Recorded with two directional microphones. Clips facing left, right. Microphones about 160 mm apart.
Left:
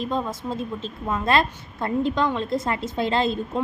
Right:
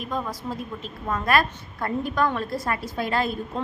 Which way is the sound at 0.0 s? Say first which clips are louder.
Left 3 dB; 25° left (ahead or behind).